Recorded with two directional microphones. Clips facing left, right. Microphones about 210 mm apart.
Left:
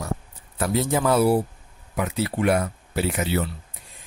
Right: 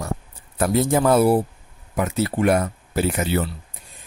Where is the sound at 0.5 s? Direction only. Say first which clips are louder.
Right 4 dB; 50° right (ahead or behind).